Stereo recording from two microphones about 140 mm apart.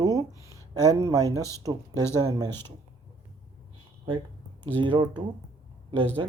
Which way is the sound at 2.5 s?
15° left (ahead or behind).